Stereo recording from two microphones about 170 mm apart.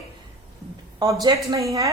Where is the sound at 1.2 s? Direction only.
20° right (ahead or behind).